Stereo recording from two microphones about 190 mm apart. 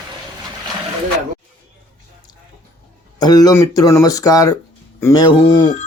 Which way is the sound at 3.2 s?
20° left (ahead or behind).